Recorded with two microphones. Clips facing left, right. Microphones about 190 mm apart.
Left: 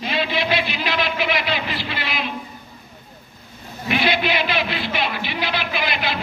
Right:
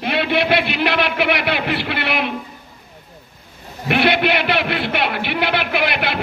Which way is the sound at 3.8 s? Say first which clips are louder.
Right 4 dB; 60° right (ahead or behind).